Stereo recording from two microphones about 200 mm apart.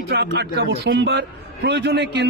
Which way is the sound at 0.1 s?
55° right (ahead or behind).